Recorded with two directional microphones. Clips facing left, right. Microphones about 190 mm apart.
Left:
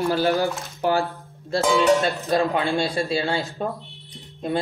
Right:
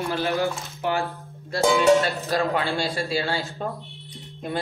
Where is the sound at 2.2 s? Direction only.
15° left (ahead or behind).